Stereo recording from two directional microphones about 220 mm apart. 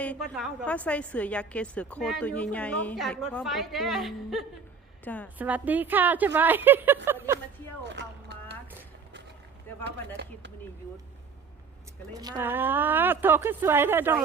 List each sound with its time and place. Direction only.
0.0 s a woman's voice: 5° left (ahead or behind)
5.4 s a woman's voice: 5° right (ahead or behind)
7.9 s a sound: 50° right (ahead or behind)
12.1 s a woman's voice: 15° right (ahead or behind)